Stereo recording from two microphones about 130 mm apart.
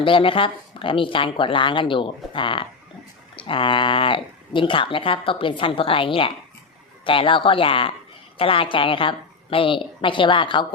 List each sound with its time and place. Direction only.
0.0 s speech: 40° left (ahead or behind)